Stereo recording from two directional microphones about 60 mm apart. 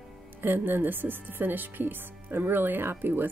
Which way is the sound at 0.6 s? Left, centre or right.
Right.